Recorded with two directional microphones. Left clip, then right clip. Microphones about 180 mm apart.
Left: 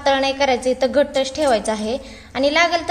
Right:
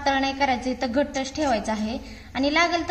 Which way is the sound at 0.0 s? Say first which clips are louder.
Left 5 dB; 45° left (ahead or behind).